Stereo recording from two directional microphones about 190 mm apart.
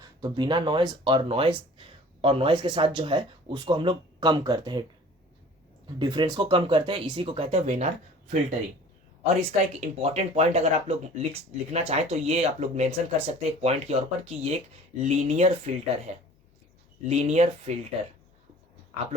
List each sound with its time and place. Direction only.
0.0 s speech: 25° right (ahead or behind)
6.0 s speech: 20° right (ahead or behind); by 8.5 s 35° right (ahead or behind)
9.8 s speech: 35° right (ahead or behind)